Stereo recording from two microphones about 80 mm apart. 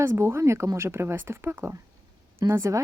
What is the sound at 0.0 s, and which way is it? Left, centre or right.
A woman's voice, right.